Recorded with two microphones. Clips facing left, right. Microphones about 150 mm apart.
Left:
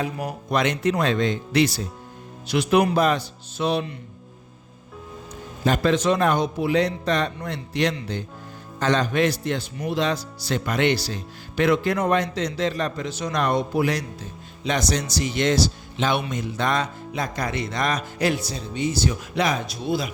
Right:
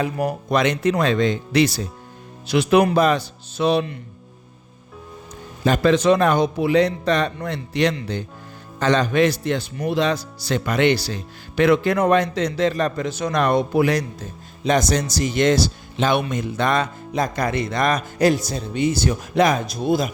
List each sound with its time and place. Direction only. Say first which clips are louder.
0.0 s speech: right 5 dB; 75° right (ahead or behind)
5.6 s a man's voice: right 4 dB; 90° right; by 14.0 s 65° right (ahead or behind)
14.2 s speech: right 3 dB; 45° right (ahead or behind)
17.1 s speech: right 5 dB; 45° right (ahead or behind)
18.7 s speech: right 4 dB; 60° right (ahead or behind)